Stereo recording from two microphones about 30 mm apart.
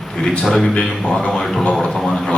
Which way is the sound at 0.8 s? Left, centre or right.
Left.